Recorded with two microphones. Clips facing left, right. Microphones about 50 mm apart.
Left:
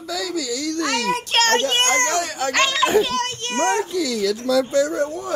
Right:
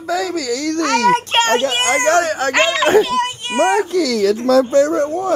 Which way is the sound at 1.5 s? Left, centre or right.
Centre.